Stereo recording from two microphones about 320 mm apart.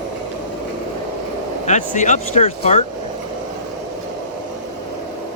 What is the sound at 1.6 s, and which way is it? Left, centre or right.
Speech, left.